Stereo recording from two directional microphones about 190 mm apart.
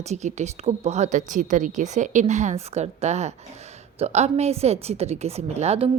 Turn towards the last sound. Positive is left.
turn(degrees=-35)  # may be behind; listen again after turning